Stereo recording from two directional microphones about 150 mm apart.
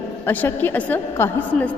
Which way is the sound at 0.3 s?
10° left (ahead or behind).